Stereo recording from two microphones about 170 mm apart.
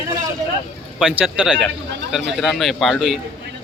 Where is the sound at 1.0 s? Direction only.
5° right (ahead or behind).